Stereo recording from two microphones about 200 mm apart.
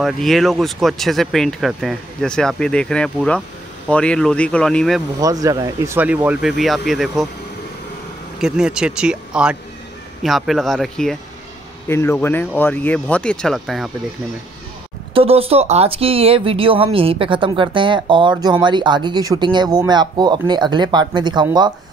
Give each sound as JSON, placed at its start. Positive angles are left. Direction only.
{"t": 0.0, "sound": "speech", "side_deg": 0}
{"t": 5.2, "sound": "speech", "side_deg": -15}
{"t": 8.4, "sound": "speech", "side_deg": -5}
{"t": 11.9, "sound": "speech", "side_deg": 10}
{"t": 15.1, "sound": "speech", "side_deg": -30}